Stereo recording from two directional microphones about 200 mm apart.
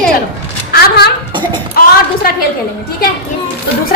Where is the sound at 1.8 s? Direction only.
45° left (ahead or behind).